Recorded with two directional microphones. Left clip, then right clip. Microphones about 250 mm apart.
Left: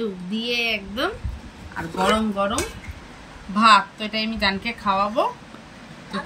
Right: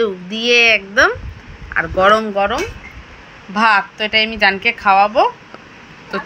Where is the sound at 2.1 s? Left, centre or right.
Right.